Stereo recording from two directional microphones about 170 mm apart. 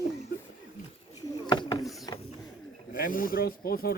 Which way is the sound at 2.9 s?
55° left (ahead or behind).